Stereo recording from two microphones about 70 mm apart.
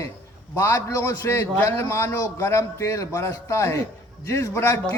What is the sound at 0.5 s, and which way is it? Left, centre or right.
A man's voice, left.